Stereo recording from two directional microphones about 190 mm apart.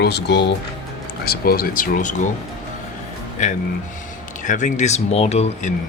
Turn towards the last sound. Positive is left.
turn(degrees=35)  # may be behind; listen again after turning